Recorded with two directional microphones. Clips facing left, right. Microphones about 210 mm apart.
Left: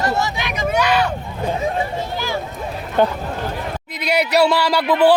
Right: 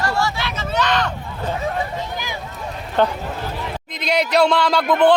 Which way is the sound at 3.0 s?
10° left (ahead or behind).